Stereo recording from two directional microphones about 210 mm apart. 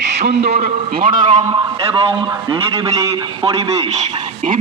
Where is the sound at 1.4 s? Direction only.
20° right (ahead or behind).